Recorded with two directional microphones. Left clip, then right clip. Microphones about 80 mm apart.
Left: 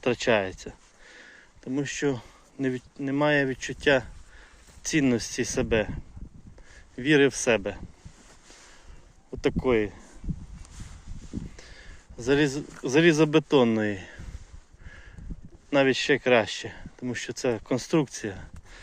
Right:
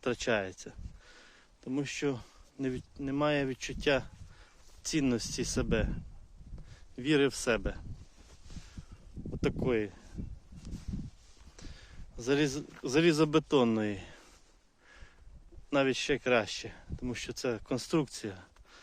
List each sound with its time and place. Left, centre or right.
0.0 s speech: centre
1.0 s sniff: right
1.3 s a sound: right
2.6 s speech: right
3.8 s speech: right
9.6 s speech: centre
11.5 s a sound: right
12.8 s speech: right
13.7 s speech: right
15.9 s speech: centre
17.1 s speech: right
17.4 s speech: right